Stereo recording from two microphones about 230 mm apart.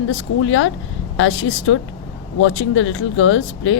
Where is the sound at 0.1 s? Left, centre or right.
Left.